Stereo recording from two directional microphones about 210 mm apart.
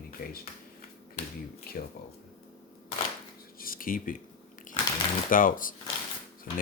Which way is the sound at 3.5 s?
45° left (ahead or behind).